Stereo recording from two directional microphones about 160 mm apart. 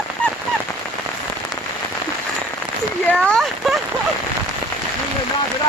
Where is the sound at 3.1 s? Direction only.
5° left (ahead or behind).